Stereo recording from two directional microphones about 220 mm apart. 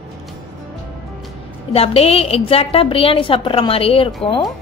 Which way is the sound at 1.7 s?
25° left (ahead or behind).